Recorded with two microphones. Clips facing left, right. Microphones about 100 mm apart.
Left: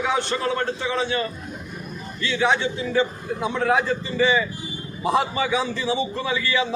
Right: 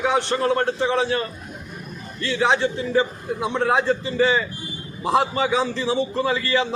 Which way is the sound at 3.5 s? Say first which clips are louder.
Right 1 dB; 30° right (ahead or behind).